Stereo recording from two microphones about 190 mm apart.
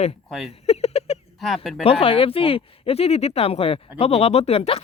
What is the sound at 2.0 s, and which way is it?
Speech, 30° left (ahead or behind).